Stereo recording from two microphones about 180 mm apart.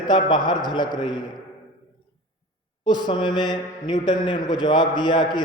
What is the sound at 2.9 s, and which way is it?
A man's voice, 25° left (ahead or behind).